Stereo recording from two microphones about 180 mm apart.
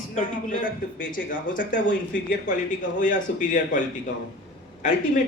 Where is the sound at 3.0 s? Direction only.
45° left (ahead or behind).